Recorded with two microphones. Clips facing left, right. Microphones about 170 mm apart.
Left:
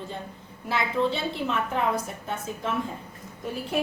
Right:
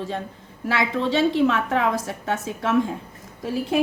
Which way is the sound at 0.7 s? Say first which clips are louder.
Right 3 dB; 85° right.